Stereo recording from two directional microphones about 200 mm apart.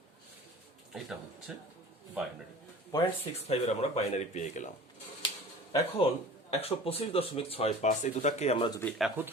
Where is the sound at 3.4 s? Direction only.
30° left (ahead or behind).